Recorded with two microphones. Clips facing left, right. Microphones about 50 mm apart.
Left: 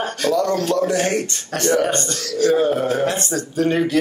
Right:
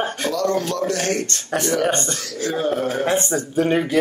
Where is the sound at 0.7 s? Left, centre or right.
Centre.